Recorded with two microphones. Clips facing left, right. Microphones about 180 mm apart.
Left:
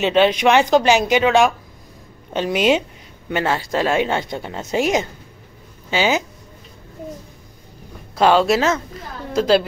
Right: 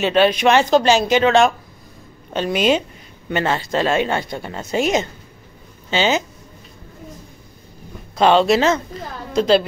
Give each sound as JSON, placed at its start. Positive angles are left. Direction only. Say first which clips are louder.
{"t": 0.0, "sound": "a woman's voice", "louder": "even", "side_deg": 20}
{"t": 8.2, "sound": "a woman's voice", "louder": "right 1 dB", "side_deg": 5}